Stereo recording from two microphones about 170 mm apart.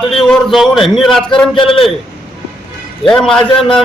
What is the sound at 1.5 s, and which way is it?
Speech, 30° left (ahead or behind).